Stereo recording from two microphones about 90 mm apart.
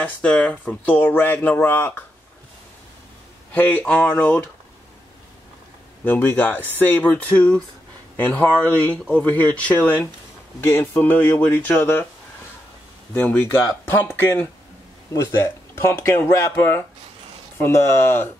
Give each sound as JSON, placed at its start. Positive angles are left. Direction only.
{"t": 0.0, "sound": "speech", "side_deg": 15}
{"t": 3.5, "sound": "speech", "side_deg": 20}
{"t": 6.0, "sound": "speech", "side_deg": 20}
{"t": 8.9, "sound": "speech", "side_deg": 15}
{"t": 13.1, "sound": "speech", "side_deg": 20}